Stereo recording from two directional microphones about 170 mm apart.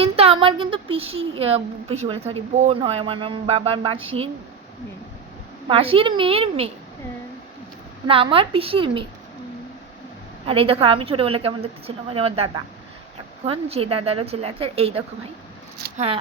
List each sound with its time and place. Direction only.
0.0 s a woman's voice: 35° right (ahead or behind)
5.6 s a woman's voice: 35° right (ahead or behind)
8.0 s a woman's voice: 30° right (ahead or behind)
10.4 s a woman's voice: 35° right (ahead or behind)